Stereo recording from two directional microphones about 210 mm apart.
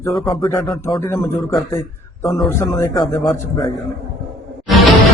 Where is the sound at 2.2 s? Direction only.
Centre (ahead or behind).